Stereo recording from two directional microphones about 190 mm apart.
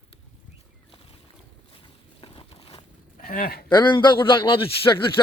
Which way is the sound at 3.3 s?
50° left (ahead or behind).